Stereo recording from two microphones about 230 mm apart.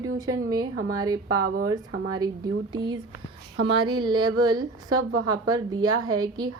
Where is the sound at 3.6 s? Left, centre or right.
Right.